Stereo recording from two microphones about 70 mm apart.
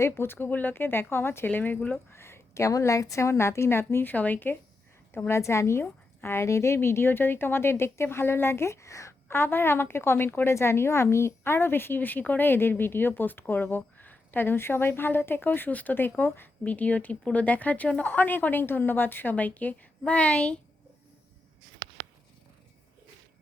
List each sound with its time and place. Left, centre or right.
0.0 s speech: left
2.1 s speech: left
5.3 s speech: left; by 20.6 s centre